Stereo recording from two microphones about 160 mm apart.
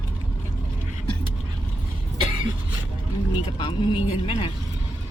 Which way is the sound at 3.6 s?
30° left (ahead or behind).